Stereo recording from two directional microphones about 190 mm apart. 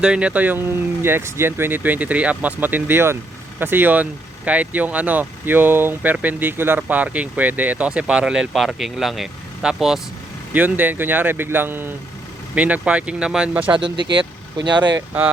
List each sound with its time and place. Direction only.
0.0 s speech: 5° right (ahead or behind)
13.7 s speech: 25° right (ahead or behind)